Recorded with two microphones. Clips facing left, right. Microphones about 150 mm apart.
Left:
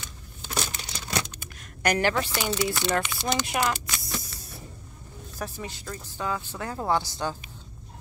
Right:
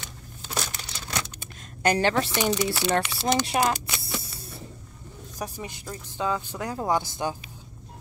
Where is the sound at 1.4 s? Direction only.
25° right (ahead or behind).